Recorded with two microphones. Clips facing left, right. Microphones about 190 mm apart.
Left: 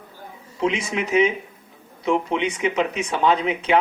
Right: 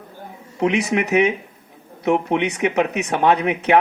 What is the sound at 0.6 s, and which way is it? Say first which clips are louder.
Speech: right 4 dB; 70° right (ahead or behind).